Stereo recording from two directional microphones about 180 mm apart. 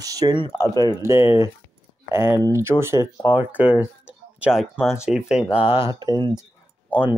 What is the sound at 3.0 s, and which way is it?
Speech, 20° left (ahead or behind).